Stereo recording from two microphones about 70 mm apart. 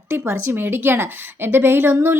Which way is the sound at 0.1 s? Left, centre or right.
Right.